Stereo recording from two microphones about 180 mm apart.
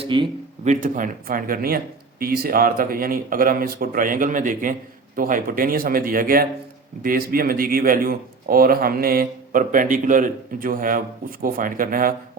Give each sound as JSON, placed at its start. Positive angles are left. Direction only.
{"t": 0.0, "sound": "speech", "side_deg": -25}
{"t": 0.6, "sound": "speech", "side_deg": -45}